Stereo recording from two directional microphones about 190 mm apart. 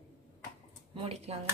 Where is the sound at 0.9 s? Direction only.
30° right (ahead or behind).